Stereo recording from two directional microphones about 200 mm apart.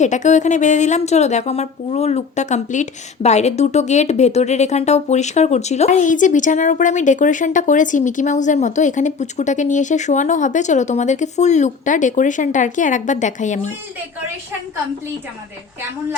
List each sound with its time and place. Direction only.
0.0 s speech: 35° left (ahead or behind)